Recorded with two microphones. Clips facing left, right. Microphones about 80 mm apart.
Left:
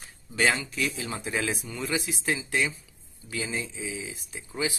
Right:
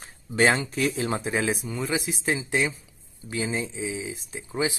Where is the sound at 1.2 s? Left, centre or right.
Right.